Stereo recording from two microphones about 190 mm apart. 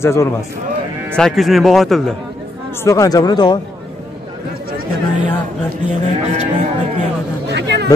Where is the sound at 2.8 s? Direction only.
15° left (ahead or behind).